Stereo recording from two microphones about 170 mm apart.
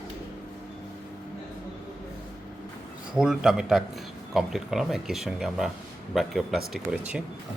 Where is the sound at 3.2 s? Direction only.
5° right (ahead or behind).